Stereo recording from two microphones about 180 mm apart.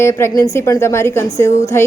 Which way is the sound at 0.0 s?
15° left (ahead or behind).